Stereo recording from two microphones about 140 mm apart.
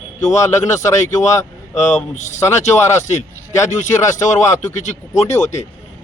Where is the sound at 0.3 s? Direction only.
20° left (ahead or behind).